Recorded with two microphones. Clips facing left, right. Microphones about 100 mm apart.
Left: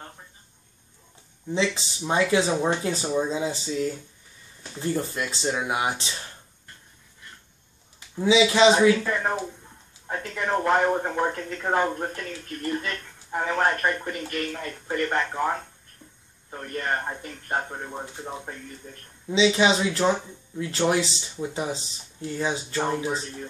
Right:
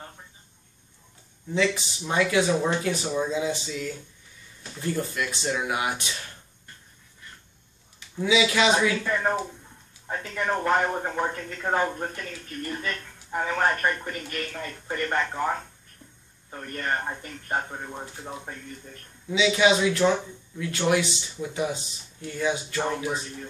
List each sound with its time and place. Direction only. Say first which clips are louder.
1.5 s speech: right 1 dB; 25° left (ahead or behind)
8.2 s speech: left 4 dB; 25° left (ahead or behind)
9.0 s speech: right 1 dB; 5° left (ahead or behind)
19.3 s speech: left 1 dB; 30° left (ahead or behind)